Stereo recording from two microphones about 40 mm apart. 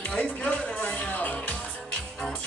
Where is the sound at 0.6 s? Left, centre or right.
Left.